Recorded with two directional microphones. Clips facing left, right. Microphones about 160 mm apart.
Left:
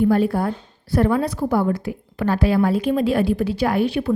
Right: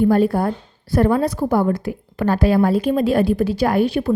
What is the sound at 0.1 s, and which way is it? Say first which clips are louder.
A woman's voice: right 2 dB; 40° right (ahead or behind).